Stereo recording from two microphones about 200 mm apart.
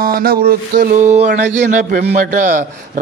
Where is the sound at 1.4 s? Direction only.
40° right (ahead or behind).